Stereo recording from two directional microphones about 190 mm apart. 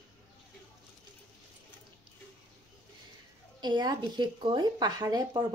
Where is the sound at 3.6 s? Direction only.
20° right (ahead or behind).